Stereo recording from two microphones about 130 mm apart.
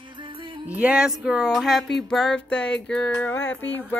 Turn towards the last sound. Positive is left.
turn(degrees=15)  # may be behind; listen again after turning